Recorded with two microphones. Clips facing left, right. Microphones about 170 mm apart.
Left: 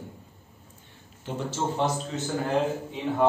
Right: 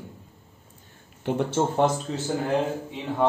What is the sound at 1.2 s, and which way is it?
Speech, 60° right (ahead or behind).